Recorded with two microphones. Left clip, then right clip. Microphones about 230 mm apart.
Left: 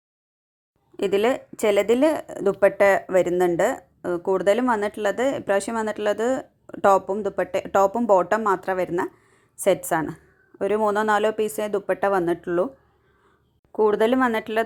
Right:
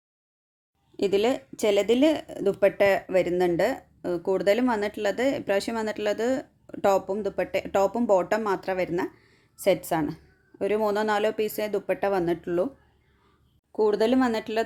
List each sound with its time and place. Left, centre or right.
0.9 s speech: centre
13.7 s speech: centre